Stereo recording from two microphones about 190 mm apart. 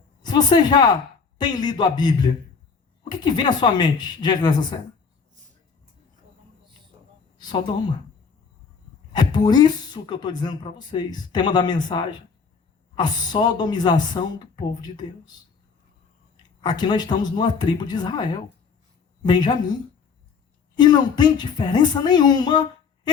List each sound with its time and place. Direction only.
0.2 s speech: 20° left (ahead or behind)
9.1 s speech: 20° left (ahead or behind)
16.6 s speech: 20° left (ahead or behind)
20.7 s speech: 20° left (ahead or behind)